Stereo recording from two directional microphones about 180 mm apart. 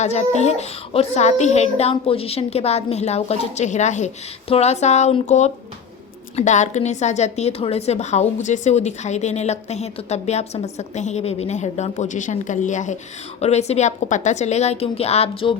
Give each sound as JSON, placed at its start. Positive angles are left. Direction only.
{"t": 0.0, "sound": "a woman's voice", "side_deg": 40}